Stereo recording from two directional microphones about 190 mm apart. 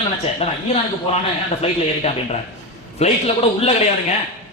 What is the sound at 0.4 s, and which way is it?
Speech, 30° left (ahead or behind).